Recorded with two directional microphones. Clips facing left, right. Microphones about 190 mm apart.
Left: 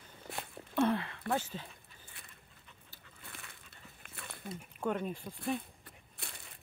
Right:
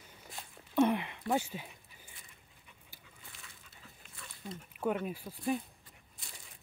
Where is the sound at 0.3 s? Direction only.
65° left (ahead or behind).